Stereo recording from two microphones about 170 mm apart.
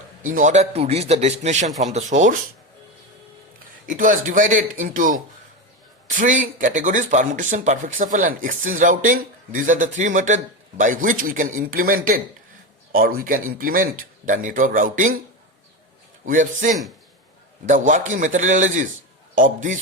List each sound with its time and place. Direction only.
0.2 s speech: 50° right (ahead or behind)
3.8 s speech: 50° right (ahead or behind)
16.2 s speech: 50° right (ahead or behind)